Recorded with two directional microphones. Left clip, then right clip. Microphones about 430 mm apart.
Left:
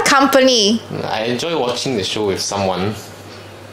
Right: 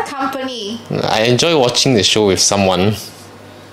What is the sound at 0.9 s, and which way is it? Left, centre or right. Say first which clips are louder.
Speech: right 6 dB; right.